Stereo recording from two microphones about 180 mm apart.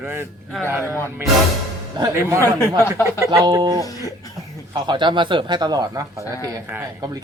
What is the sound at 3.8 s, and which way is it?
Speech, 20° left (ahead or behind).